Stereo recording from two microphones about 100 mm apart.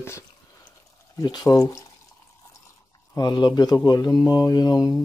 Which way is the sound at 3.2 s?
45° left (ahead or behind).